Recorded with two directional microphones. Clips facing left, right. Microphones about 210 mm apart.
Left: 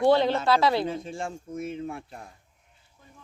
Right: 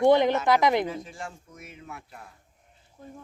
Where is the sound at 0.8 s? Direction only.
30° left (ahead or behind).